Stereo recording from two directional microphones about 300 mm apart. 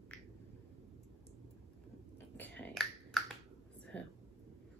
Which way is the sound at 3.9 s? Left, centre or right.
Centre.